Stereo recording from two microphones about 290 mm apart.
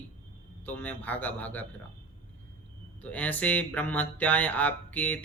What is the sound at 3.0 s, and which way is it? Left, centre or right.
Speech, centre.